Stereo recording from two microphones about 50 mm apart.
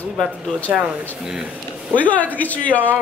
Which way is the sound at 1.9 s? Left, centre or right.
Left.